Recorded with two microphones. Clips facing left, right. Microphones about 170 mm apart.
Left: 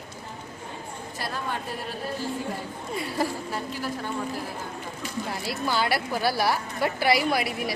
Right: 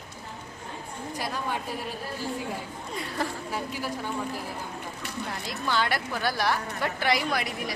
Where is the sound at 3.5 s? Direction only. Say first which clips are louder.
Left 1 dB; 10° right (ahead or behind).